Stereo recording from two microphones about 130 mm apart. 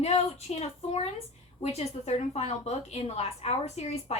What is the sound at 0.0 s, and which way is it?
A woman's voice, 55° left (ahead or behind).